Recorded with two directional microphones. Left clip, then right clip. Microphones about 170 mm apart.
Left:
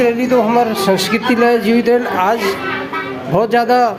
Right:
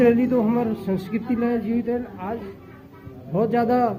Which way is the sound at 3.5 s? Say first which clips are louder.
Left 8 dB; 25° left (ahead or behind).